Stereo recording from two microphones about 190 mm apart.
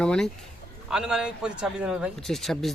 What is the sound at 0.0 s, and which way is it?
A man's voice, 5° left (ahead or behind).